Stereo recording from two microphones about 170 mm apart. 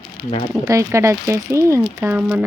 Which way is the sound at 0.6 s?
20° right (ahead or behind).